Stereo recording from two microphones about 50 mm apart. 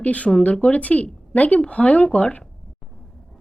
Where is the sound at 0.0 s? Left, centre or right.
Left.